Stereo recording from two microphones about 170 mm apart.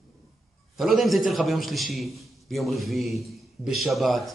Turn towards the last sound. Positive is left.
turn(degrees=0)  # may be behind; listen again after turning